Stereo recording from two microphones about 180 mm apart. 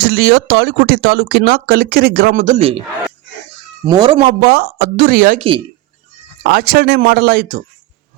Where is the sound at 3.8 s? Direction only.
25° right (ahead or behind).